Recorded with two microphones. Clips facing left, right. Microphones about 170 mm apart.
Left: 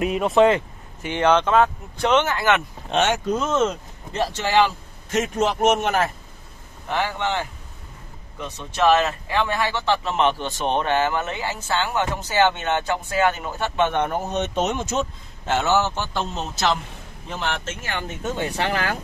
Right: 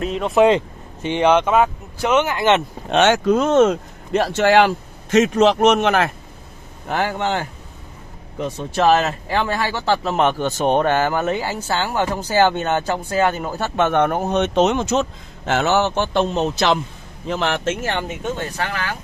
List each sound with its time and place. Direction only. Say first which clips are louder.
0.0 s speech: left 1 dB; 5° left (ahead or behind)
0.4 s speech: right 3 dB; 20° right (ahead or behind)
2.9 s speech: right 6 dB; 80° right
6.9 s speech: right 3 dB; 45° right (ahead or behind)
13.7 s speech: right 5 dB; 50° right (ahead or behind)
17.3 s speech: right 7 dB; 90° right
18.6 s speech: left 2 dB; 35° left (ahead or behind)